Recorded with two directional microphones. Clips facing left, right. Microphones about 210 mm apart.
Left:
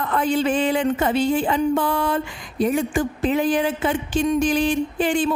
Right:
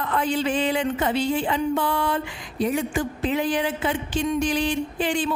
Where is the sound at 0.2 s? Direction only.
50° left (ahead or behind).